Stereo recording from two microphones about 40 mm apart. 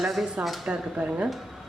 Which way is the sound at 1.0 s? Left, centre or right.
Right.